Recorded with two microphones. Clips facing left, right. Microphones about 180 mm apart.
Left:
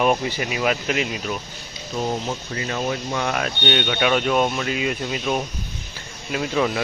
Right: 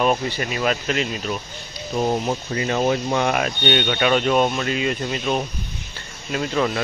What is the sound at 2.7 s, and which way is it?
Speech, 40° right (ahead or behind).